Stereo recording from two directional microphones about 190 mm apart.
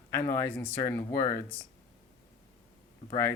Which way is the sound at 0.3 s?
10° left (ahead or behind).